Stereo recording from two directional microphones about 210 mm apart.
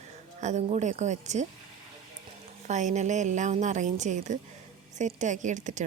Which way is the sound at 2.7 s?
35° right (ahead or behind).